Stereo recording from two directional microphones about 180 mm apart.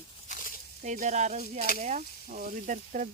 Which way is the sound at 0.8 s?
45° right (ahead or behind).